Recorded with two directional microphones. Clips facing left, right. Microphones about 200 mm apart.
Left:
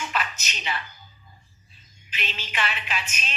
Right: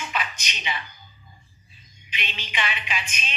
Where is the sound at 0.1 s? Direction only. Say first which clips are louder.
Left 1 dB; 5° right (ahead or behind).